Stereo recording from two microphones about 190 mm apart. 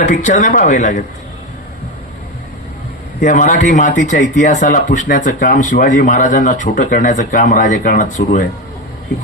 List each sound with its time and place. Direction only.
0.0 s speech: 40° left (ahead or behind)
3.2 s speech: 40° left (ahead or behind)